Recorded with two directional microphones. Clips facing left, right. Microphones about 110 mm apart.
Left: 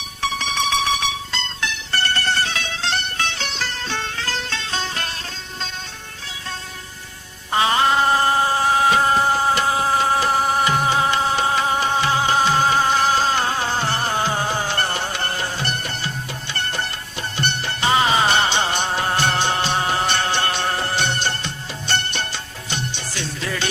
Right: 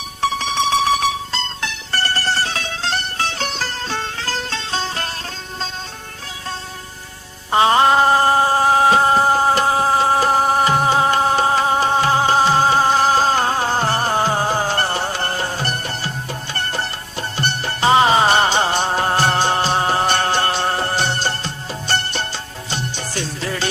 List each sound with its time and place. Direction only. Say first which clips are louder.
0.2 s music: right 4 dB; 35° right (ahead or behind)
7.5 s music: right 4 dB; 35° right (ahead or behind)